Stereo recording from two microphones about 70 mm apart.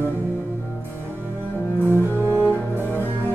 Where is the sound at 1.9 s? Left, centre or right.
Right.